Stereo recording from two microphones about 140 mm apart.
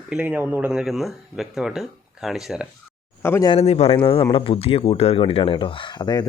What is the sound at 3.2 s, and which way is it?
Speech, 15° left (ahead or behind).